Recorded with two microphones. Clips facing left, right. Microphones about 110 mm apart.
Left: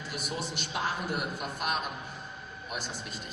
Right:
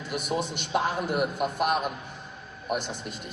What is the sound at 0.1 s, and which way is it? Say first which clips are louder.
A man's voice: right 8 dB; 55° right (ahead or behind).